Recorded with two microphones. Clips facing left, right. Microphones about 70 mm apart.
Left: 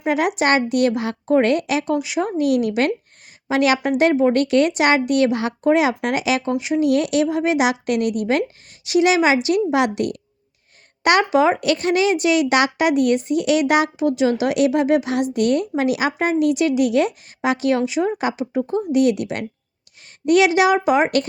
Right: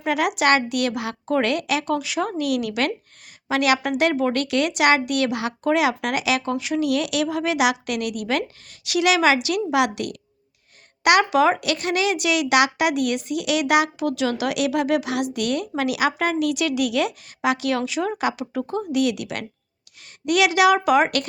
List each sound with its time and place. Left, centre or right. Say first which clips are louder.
0.0 s speech: left 2 dB; left